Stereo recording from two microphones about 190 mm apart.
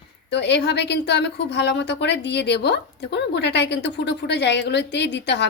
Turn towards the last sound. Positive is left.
turn(degrees=65)  # may be behind; listen again after turning